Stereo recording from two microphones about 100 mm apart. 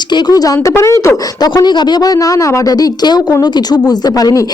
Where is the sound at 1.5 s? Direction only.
45° left (ahead or behind).